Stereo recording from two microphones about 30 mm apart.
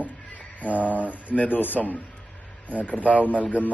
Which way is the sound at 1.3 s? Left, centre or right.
Left.